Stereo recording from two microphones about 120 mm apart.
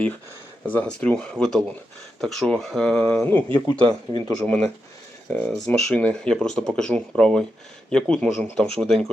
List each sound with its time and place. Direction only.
0.6 s speech: 10° left (ahead or behind)